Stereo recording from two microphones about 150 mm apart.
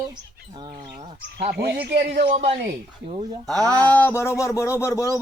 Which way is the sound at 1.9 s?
90° right.